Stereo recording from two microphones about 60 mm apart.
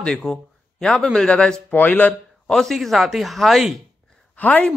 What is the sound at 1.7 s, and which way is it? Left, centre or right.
Speech, left.